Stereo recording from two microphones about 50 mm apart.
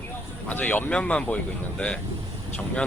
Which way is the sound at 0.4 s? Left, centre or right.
Left.